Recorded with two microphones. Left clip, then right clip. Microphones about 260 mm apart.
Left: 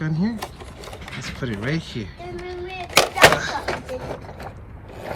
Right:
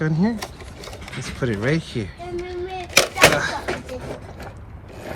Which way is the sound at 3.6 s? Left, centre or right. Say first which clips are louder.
Left 1 dB; left.